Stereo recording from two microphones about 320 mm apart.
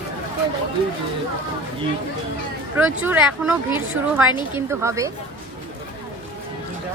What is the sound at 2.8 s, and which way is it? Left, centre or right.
A woman's voice, centre.